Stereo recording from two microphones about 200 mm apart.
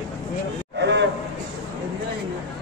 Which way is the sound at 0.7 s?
60° right (ahead or behind).